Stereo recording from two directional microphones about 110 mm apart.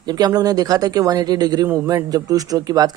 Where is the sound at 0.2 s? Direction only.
35° right (ahead or behind).